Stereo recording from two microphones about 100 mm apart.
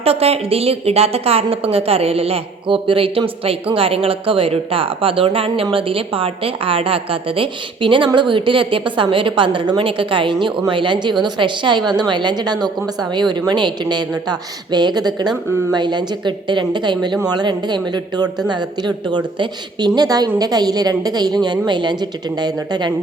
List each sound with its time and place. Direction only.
0.0 s a woman's voice: 85° right; by 22.9 s 45° right (ahead or behind)